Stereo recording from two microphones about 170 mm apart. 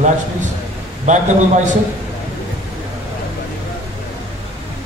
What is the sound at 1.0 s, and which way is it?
Speech, 45° right (ahead or behind).